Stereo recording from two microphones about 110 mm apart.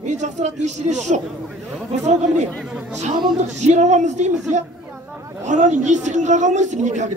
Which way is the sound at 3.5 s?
90° right.